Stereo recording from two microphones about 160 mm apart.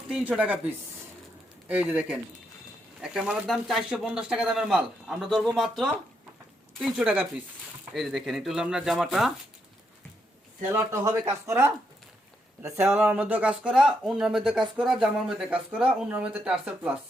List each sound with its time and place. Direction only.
0.1 s speech: 10° right (ahead or behind)
10.7 s speech: 15° right (ahead or behind)